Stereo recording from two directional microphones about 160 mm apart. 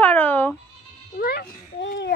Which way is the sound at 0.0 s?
10° left (ahead or behind).